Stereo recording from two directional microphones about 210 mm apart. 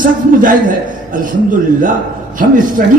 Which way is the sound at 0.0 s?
40° right (ahead or behind).